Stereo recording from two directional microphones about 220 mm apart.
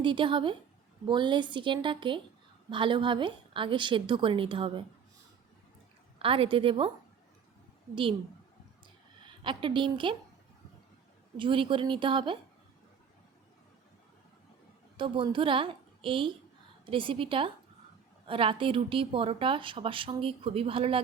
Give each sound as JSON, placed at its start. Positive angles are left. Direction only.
{"t": 0.0, "sound": "a woman's voice", "side_deg": -20}
{"t": 6.1, "sound": "a woman's voice", "side_deg": -25}
{"t": 9.4, "sound": "a woman's voice", "side_deg": -20}
{"t": 11.3, "sound": "a woman's voice", "side_deg": -20}
{"t": 14.9, "sound": "a woman's voice", "side_deg": -20}